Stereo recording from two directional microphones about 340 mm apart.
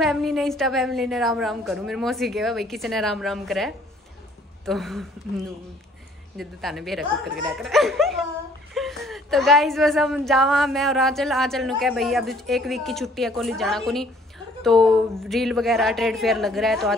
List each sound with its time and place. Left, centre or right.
0.0 s a woman's voice: centre
6.3 s a woman's voice: centre
15.1 s a woman's voice: centre